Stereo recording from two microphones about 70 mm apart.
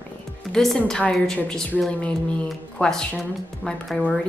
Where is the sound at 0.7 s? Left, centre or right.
Centre.